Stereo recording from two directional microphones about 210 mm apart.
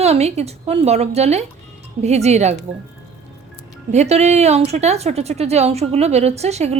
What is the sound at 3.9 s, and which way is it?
A woman's voice, 30° right (ahead or behind).